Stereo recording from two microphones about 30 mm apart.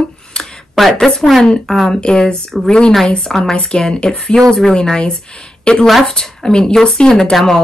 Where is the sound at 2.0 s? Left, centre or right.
Left.